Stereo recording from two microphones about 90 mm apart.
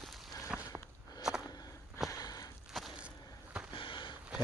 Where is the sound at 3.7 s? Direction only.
65° left (ahead or behind).